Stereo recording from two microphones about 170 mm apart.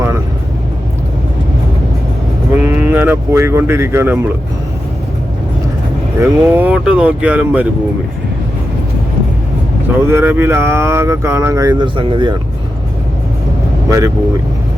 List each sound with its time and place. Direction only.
2.5 s a sound: 10° right (ahead or behind)
6.1 s speech: 15° right (ahead or behind)
10.1 s speech: 15° right (ahead or behind)